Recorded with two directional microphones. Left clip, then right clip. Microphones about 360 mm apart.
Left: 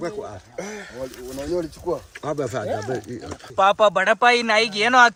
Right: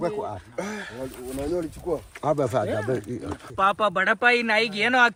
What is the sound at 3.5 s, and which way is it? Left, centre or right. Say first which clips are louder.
A man's voice: left 5 dB; centre.